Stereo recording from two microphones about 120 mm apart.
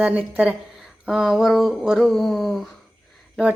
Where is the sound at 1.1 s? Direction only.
Centre (ahead or behind).